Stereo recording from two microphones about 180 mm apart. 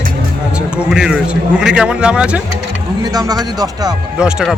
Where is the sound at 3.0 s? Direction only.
20° right (ahead or behind).